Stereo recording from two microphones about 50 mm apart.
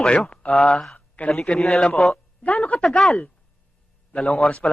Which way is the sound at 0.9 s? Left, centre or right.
Left.